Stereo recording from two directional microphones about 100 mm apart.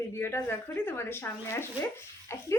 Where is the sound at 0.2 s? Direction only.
25° left (ahead or behind).